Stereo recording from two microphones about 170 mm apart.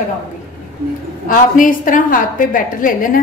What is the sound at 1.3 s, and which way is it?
A woman's voice, 50° left (ahead or behind).